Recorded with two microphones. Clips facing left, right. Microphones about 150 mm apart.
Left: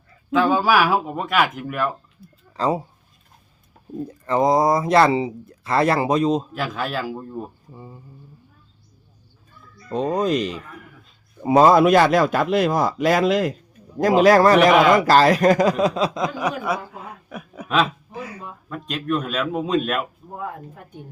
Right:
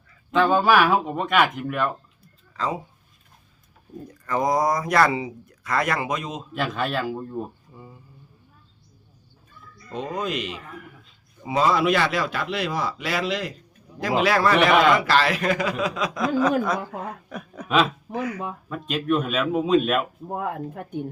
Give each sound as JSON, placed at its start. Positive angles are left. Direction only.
{"t": 0.3, "sound": "speech", "side_deg": 0}
{"t": 2.5, "sound": "speech", "side_deg": 35}
{"t": 4.3, "sound": "speech", "side_deg": 25}
{"t": 6.5, "sound": "speech", "side_deg": 0}
{"t": 7.7, "sound": "speech", "side_deg": 25}
{"t": 9.9, "sound": "a man's voice", "side_deg": 35}
{"t": 16.2, "sound": "speech", "side_deg": 10}
{"t": 17.2, "sound": "chuckle", "side_deg": 5}
{"t": 18.1, "sound": "speech", "side_deg": -70}
{"t": 18.7, "sound": "speech", "side_deg": 0}
{"t": 20.3, "sound": "speech", "side_deg": -65}